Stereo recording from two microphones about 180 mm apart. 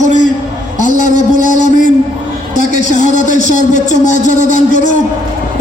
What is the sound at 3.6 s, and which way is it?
Speech, 40° left (ahead or behind).